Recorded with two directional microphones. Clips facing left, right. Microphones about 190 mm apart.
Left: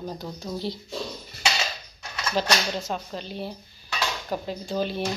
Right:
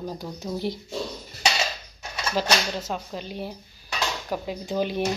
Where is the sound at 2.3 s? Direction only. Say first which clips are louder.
Even; 5° right (ahead or behind).